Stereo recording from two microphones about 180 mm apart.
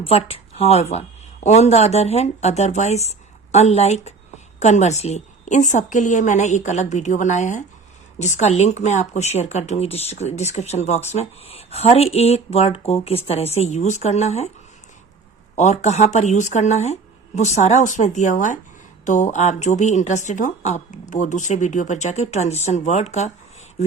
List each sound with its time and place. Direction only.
0.0 s speech: 30° left (ahead or behind)
15.5 s speech: 40° left (ahead or behind)